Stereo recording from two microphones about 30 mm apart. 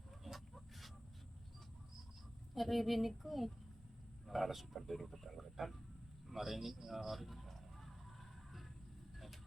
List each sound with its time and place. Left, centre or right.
0.3 s a sound: centre
2.6 s a man's voice: centre
9.1 s vehicle: centre